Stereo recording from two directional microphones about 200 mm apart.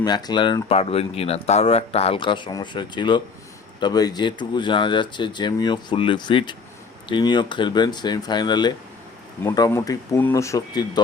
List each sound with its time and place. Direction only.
0.0 s speech: 20° left (ahead or behind)